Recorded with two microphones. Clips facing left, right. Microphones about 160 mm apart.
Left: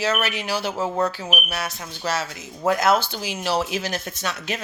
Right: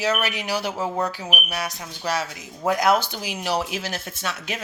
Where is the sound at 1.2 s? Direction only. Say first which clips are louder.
Left 2 dB; centre (ahead or behind).